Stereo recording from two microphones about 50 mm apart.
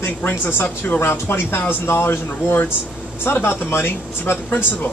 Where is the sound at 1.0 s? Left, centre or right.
Left.